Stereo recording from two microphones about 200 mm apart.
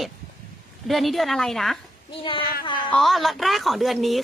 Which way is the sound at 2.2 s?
25° left (ahead or behind).